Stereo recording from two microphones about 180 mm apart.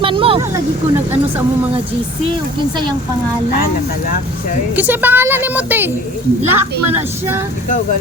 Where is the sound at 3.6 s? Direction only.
50° left (ahead or behind).